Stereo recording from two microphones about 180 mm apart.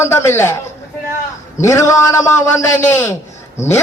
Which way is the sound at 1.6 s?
15° left (ahead or behind).